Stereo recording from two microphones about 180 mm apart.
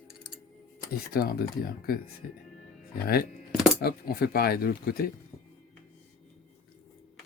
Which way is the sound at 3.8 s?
60° left (ahead or behind).